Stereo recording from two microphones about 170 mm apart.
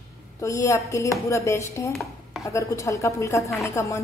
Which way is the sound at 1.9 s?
Centre (ahead or behind).